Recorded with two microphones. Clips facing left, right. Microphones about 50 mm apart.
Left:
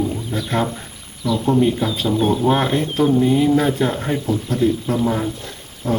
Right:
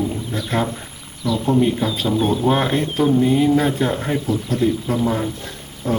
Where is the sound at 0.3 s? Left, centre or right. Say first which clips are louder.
Left 1 dB; centre.